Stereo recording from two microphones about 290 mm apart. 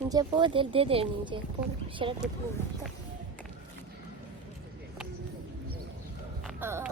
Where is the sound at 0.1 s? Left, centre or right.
Centre.